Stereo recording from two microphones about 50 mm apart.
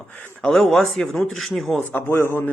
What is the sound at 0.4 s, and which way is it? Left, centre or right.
Speech, centre.